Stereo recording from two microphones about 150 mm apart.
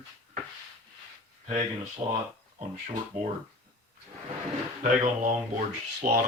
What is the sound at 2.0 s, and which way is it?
Speech, 40° right (ahead or behind).